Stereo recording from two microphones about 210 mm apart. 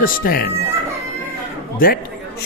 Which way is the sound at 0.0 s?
45° left (ahead or behind).